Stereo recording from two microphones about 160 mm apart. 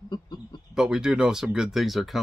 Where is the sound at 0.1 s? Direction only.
25° left (ahead or behind).